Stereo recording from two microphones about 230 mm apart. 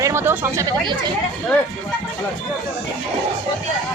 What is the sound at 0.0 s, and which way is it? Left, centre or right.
Speech, centre.